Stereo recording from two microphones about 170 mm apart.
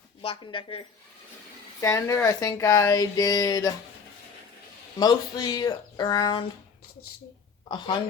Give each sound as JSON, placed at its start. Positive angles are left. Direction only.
{"t": 0.2, "sound": "a woman's voice", "side_deg": 30}
{"t": 1.8, "sound": "speech", "side_deg": 15}
{"t": 4.9, "sound": "speech", "side_deg": 20}
{"t": 7.7, "sound": "speech", "side_deg": 25}